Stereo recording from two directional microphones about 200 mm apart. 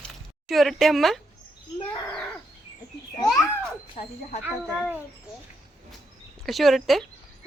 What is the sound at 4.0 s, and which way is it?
Speech, 30° left (ahead or behind).